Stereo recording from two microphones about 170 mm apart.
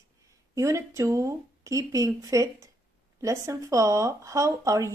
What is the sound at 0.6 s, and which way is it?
A woman's voice, 15° right (ahead or behind).